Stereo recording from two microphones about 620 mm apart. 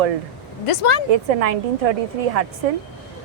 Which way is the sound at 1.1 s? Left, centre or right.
Right.